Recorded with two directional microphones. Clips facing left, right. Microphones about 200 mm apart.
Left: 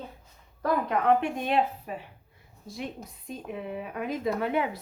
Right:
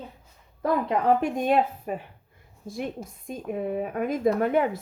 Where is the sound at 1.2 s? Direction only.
45° right (ahead or behind).